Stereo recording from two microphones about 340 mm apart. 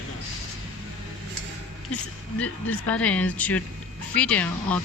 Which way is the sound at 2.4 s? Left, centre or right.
Centre.